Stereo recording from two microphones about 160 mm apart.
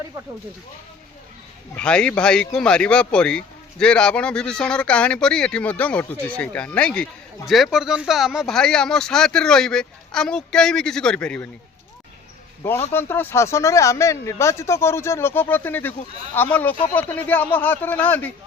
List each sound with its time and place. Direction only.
1.7 s speech: 5° left (ahead or behind)
12.9 s speech: 15° left (ahead or behind)